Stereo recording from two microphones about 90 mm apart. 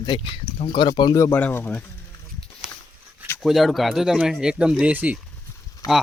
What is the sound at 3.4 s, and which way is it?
Speech, centre (ahead or behind).